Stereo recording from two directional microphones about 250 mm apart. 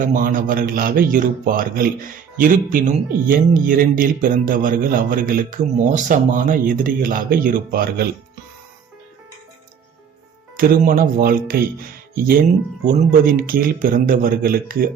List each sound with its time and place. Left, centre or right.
0.0 s a man's voice: right
10.6 s a man's voice: right